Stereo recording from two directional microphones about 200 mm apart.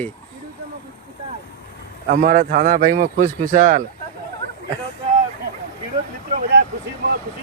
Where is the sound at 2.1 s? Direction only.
45° right (ahead or behind).